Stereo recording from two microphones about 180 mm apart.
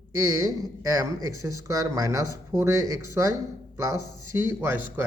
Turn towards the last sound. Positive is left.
turn(degrees=-15)  # may be behind; listen again after turning